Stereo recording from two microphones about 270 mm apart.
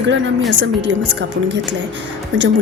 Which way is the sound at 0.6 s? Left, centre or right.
Right.